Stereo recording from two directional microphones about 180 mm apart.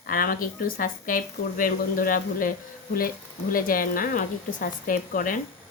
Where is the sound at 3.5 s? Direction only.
50° left (ahead or behind).